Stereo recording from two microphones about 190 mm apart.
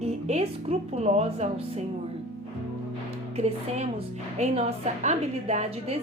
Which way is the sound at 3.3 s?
35° right (ahead or behind).